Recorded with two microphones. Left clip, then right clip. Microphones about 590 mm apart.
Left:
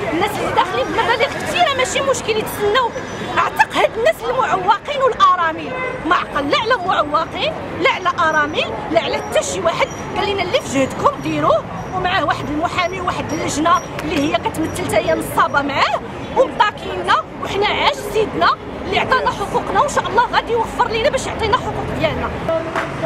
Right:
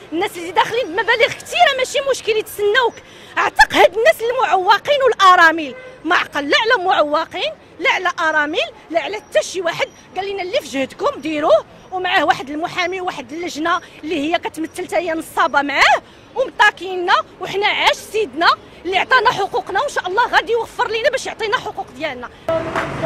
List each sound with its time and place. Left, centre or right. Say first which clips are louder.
0.2 s a sound: right 1 dB; right
3.3 s speech: right 3 dB; right
22.5 s speech: right 2 dB; centre